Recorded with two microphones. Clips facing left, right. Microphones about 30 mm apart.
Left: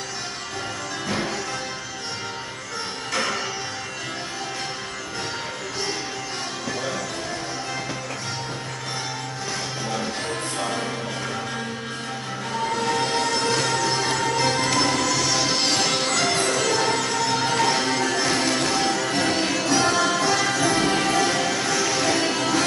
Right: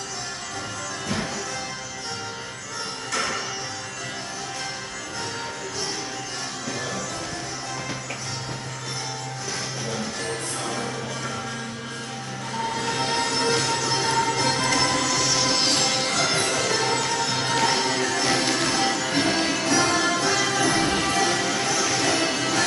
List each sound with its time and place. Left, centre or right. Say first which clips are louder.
1.0 s music: left 2 dB; centre
3.1 s music: left 2 dB; centre
9.8 s music: left 3 dB; centre
12.7 s music: left 2 dB; centre